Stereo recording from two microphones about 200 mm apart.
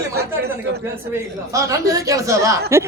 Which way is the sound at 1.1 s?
15° right (ahead or behind).